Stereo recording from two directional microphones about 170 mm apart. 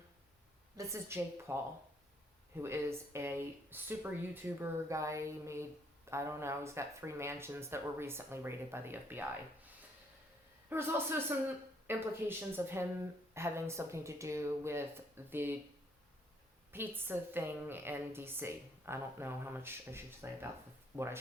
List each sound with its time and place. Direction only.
0.8 s a woman's voice: 15° right (ahead or behind)
2.6 s a woman's voice: 15° right (ahead or behind)
10.7 s a woman's voice: 15° right (ahead or behind)
16.7 s a woman's voice: 15° right (ahead or behind)